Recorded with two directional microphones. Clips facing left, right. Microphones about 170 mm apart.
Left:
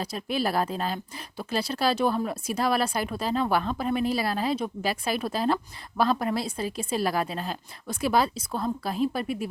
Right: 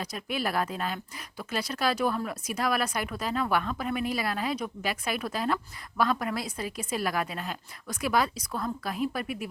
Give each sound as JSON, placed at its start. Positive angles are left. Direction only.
{"t": 0.0, "sound": "a woman's voice", "side_deg": 30}